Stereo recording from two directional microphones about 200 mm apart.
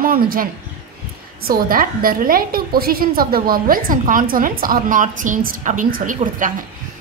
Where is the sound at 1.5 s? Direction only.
45° right (ahead or behind).